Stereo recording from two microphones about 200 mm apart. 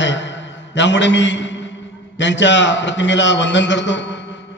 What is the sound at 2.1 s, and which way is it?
A man's voice, 65° left (ahead or behind).